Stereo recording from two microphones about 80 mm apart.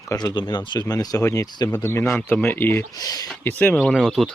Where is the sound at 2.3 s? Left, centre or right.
Left.